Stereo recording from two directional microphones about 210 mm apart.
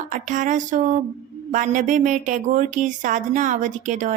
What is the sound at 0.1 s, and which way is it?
Speech, 35° right (ahead or behind).